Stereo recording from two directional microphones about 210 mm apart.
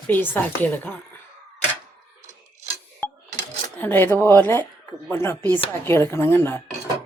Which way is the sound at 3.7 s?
10° left (ahead or behind).